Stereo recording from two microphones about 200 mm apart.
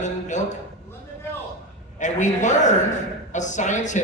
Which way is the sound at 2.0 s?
35° left (ahead or behind).